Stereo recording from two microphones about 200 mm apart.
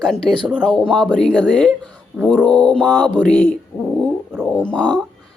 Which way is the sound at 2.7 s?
5° left (ahead or behind).